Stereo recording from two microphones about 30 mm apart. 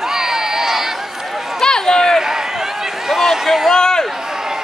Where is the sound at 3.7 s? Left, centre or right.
Left.